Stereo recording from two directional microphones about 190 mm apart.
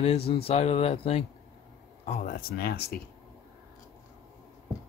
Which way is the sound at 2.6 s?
55° left (ahead or behind).